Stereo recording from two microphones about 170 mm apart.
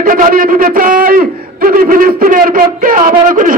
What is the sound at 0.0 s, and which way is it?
A man's voice, 55° right (ahead or behind).